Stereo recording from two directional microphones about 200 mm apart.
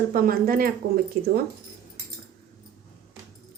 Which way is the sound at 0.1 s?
45° right (ahead or behind).